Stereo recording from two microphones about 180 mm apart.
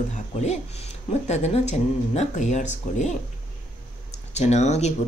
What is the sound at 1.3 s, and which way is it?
Speech, 40° left (ahead or behind).